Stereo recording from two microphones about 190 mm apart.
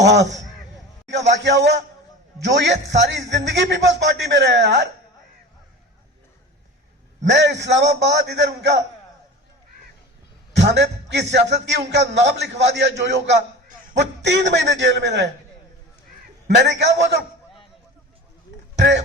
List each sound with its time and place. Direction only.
0.1 s a man's voice: 70° right (ahead or behind)
7.3 s a man's voice: 65° right (ahead or behind)
10.5 s music: 65° right (ahead or behind)
11.5 s a man's voice: 65° right (ahead or behind)
16.6 s a man's voice: 65° right (ahead or behind)
18.8 s speech: 70° right (ahead or behind)